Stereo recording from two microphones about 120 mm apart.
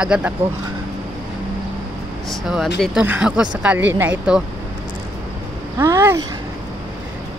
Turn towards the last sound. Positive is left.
turn(degrees=-25)  # may be behind; listen again after turning